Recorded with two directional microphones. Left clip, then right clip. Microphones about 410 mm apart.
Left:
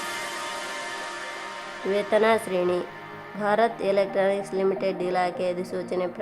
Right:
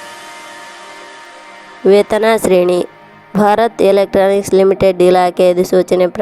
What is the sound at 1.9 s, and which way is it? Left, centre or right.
A woman's voice, right.